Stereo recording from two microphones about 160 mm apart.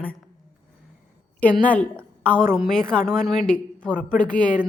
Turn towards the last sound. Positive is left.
turn(degrees=10)  # may be behind; listen again after turning